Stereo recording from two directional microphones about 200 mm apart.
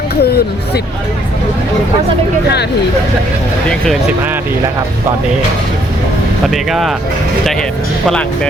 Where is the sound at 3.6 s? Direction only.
5° left (ahead or behind).